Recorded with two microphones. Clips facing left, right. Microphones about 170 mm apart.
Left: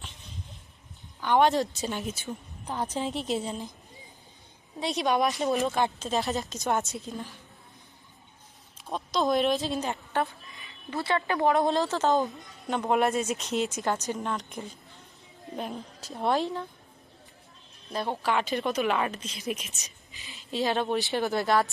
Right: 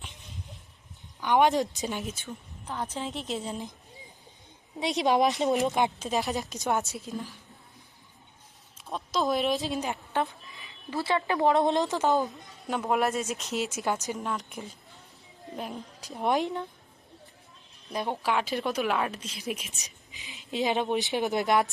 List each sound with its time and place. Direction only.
1.2 s speech: 15° right (ahead or behind)
2.0 s speech: centre (ahead or behind)
2.6 s a woman's voice: 35° left (ahead or behind)
2.9 s a woman's voice: 10° left (ahead or behind)
4.8 s speech: 20° right (ahead or behind); by 7.3 s 5° right (ahead or behind)
8.8 s speech: centre (ahead or behind)
11.4 s speech: 20° right (ahead or behind)
12.3 s speech: 5° right (ahead or behind)
16.0 s speech: 15° right (ahead or behind)
17.9 s speech: 15° right (ahead or behind)
20.1 s speech: 15° right (ahead or behind)